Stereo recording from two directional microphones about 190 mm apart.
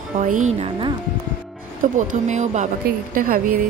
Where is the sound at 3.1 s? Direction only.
50° right (ahead or behind).